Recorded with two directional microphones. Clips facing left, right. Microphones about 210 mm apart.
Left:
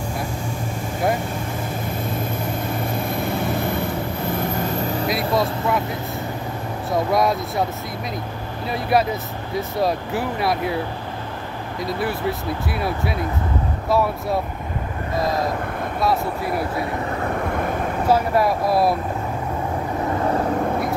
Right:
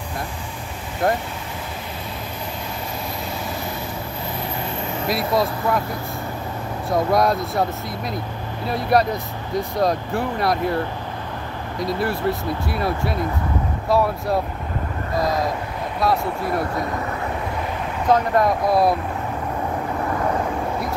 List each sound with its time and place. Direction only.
3.2 s vehicle: 55° left (ahead or behind)
5.0 s speech: centre (ahead or behind)
6.9 s speech: centre (ahead or behind)
8.6 s speech: centre (ahead or behind)
11.8 s speech: centre (ahead or behind)
16.0 s speech: centre (ahead or behind)
18.0 s speech: 5° left (ahead or behind)